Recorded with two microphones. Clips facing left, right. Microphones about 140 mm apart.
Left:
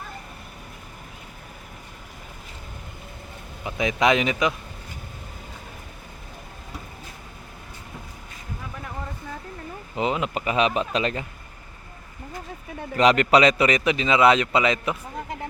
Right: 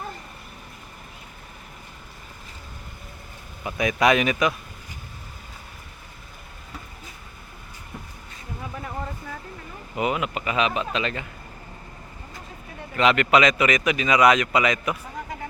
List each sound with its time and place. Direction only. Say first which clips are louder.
3.6 s a man's voice: right 1 dB; 20° left (ahead or behind)
10.0 s a man's voice: even; 25° left (ahead or behind)
13.0 s a man's voice: left 2 dB; 35° left (ahead or behind)